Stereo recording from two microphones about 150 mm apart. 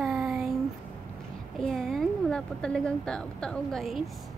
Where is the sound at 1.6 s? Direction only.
Centre (ahead or behind).